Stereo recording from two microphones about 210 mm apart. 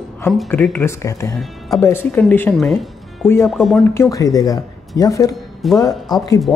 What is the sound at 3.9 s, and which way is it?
Speech, 15° left (ahead or behind).